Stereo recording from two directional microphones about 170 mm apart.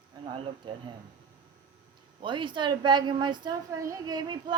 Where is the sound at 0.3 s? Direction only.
30° right (ahead or behind).